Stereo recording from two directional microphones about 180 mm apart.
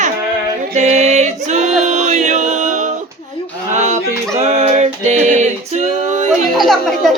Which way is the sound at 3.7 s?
40° right (ahead or behind).